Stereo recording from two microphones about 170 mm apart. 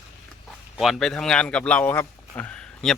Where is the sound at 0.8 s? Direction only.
Centre (ahead or behind).